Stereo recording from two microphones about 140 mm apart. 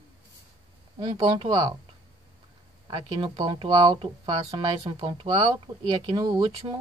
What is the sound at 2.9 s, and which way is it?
Speech, 35° right (ahead or behind).